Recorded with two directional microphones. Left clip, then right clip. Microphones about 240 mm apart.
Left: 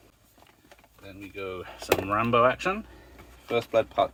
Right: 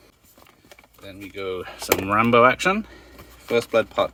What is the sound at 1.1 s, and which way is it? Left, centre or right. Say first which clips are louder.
Speech: right 6 dB; right.